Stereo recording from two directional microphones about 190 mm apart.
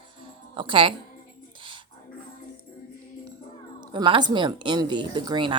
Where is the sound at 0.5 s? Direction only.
25° right (ahead or behind).